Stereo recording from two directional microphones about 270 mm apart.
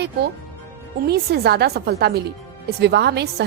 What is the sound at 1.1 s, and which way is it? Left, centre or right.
A woman's voice, right.